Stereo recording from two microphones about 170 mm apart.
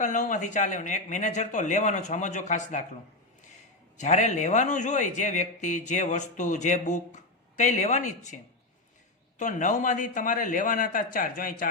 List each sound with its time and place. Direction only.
0.0 s a man's voice: 45° left (ahead or behind)
3.9 s a man's voice: 45° left (ahead or behind)
9.4 s a man's voice: 45° left (ahead or behind)